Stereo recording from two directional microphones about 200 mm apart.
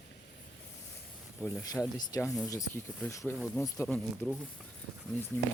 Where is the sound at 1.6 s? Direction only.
20° left (ahead or behind).